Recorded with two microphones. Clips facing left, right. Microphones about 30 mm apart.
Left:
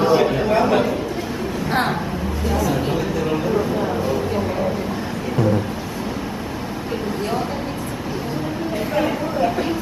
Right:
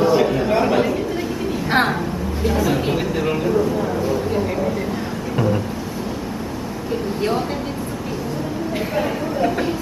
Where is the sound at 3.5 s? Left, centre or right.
Centre.